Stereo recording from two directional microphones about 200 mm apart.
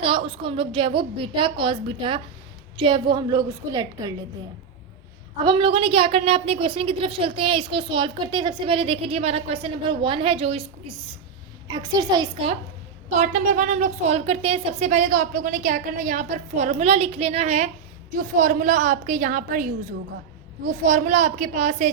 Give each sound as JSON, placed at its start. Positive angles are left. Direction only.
{"t": 0.0, "sound": "a woman's voice", "side_deg": -25}
{"t": 5.4, "sound": "a woman's voice", "side_deg": -25}
{"t": 13.1, "sound": "a woman's voice", "side_deg": -40}
{"t": 20.7, "sound": "a woman's voice", "side_deg": -40}